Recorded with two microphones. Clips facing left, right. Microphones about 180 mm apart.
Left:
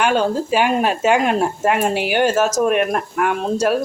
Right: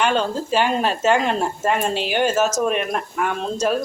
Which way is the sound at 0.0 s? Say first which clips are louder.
Left 3 dB; 10° left (ahead or behind).